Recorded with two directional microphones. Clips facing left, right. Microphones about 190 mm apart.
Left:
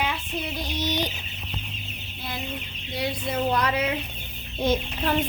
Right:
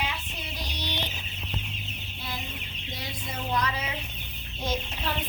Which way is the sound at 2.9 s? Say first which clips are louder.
Left 10 dB; 65° left (ahead or behind).